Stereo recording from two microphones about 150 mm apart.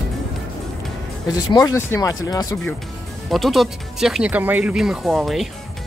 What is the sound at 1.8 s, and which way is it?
Speech, 20° left (ahead or behind).